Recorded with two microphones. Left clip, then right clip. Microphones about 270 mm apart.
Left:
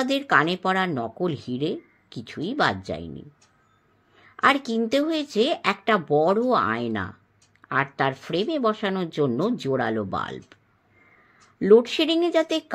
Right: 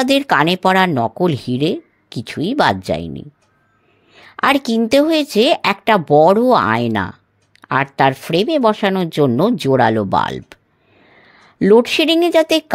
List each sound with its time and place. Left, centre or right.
0.0 s speech: right
11.6 s speech: right